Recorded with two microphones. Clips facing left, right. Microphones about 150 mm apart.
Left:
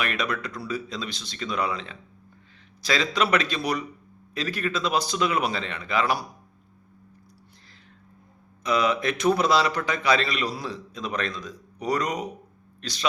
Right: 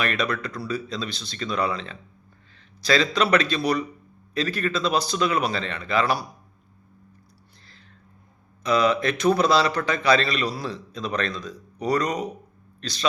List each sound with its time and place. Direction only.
0.0 s speech: 15° left (ahead or behind)
8.6 s a man's voice: 15° left (ahead or behind)